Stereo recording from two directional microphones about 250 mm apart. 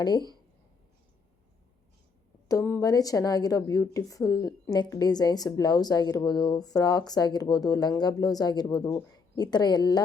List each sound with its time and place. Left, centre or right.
0.0 s a woman's voice: centre
2.5 s a woman's voice: centre